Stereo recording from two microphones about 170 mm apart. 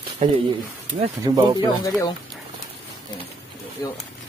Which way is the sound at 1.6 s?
20° left (ahead or behind).